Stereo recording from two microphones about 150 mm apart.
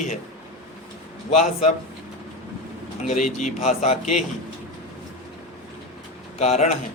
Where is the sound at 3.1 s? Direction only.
55° left (ahead or behind).